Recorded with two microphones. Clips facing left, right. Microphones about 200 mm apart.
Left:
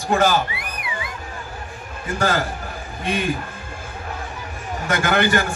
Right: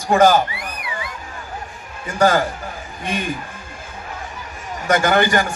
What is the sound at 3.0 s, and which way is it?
Speech, 45° right (ahead or behind).